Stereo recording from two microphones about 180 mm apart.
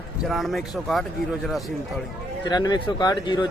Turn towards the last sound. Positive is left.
turn(degrees=25)  # may be behind; listen again after turning